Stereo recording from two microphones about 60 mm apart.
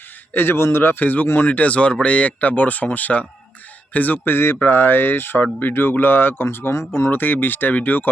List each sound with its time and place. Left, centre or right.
0.3 s a man's voice: left
7.1 s speech: left